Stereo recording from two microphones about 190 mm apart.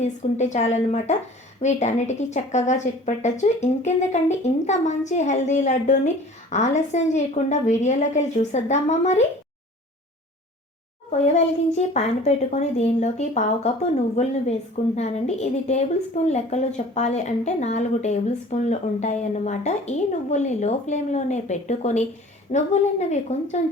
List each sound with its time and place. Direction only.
0.0 s a woman's voice: 40° left (ahead or behind)
11.3 s a woman's voice: 35° left (ahead or behind)
14.9 s a woman's voice: 35° left (ahead or behind)